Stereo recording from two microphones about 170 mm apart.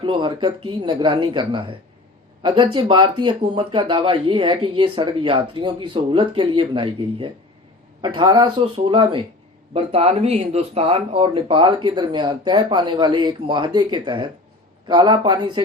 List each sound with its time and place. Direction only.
0.0 s speech: 30° right (ahead or behind)